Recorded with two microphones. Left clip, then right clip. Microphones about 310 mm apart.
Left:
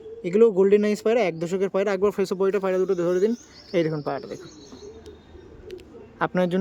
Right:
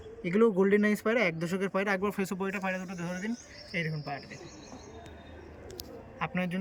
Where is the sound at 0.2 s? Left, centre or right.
Centre.